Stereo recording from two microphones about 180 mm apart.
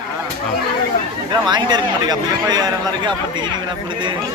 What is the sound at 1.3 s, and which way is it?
Speech, 25° right (ahead or behind).